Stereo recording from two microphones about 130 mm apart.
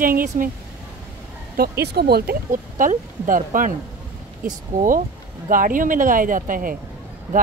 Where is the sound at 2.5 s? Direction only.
90° right.